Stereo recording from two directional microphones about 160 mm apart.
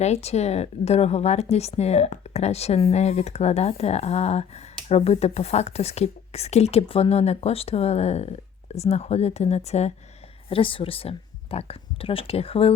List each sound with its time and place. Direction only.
0.0 s speech: 40° left (ahead or behind)